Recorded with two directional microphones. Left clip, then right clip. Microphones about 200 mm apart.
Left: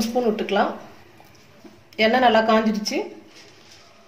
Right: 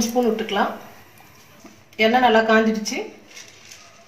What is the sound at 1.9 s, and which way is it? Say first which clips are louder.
Speech: right 1 dB; 55° left (ahead or behind).